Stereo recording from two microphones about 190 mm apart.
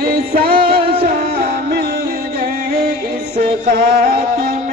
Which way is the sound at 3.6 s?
55° right (ahead or behind).